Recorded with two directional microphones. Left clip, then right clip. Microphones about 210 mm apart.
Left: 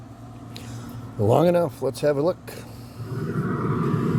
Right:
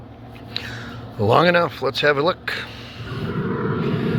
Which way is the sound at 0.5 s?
35° left (ahead or behind).